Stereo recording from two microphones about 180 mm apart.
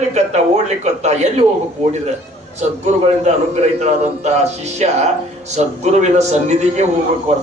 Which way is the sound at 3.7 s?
40° right (ahead or behind).